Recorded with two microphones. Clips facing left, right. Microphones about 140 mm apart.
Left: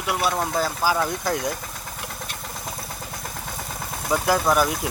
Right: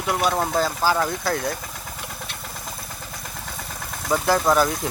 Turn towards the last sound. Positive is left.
turn(degrees=10)  # may be behind; listen again after turning